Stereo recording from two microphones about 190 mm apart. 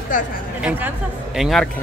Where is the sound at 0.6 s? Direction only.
10° right (ahead or behind).